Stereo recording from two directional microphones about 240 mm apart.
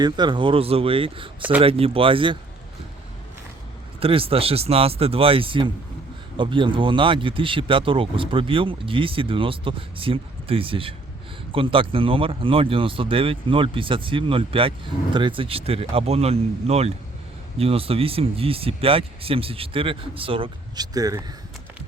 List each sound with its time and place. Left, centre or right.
0.0 s speech: centre
4.0 s speech: right